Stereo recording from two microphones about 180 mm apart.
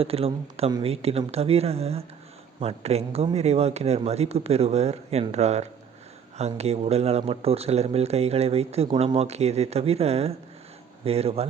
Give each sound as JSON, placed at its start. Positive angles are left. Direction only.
{"t": 0.0, "sound": "speech", "side_deg": -30}